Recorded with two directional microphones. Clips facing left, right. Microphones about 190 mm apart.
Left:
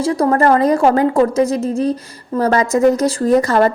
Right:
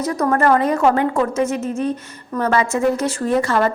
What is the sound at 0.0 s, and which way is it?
A woman's voice, 30° left (ahead or behind).